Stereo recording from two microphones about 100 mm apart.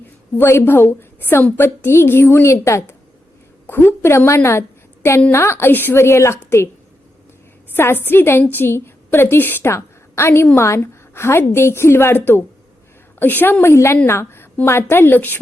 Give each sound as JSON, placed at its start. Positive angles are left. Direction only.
{"t": 0.3, "sound": "a woman's voice", "side_deg": 20}
{"t": 7.8, "sound": "a woman's voice", "side_deg": 20}